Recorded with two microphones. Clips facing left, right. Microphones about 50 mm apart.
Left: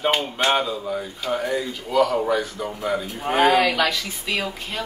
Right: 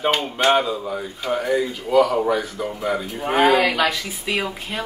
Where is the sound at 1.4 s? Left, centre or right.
Centre.